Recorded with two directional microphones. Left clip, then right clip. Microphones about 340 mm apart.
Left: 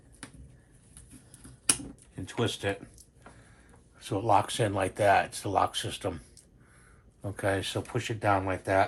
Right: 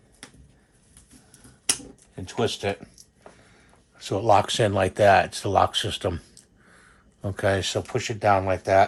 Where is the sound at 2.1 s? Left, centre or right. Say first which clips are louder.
Right 6 dB; right.